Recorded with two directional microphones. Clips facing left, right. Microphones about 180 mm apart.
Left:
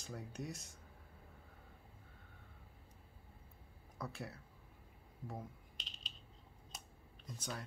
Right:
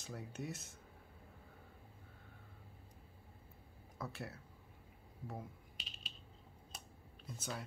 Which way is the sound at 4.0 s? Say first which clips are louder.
Even; centre (ahead or behind).